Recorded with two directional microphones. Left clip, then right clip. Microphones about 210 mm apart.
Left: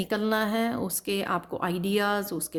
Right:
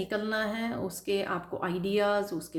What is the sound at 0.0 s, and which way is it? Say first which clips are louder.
A woman's voice: left 4 dB; 50° left (ahead or behind).